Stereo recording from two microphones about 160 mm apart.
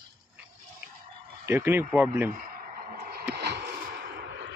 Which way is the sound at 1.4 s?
15° right (ahead or behind).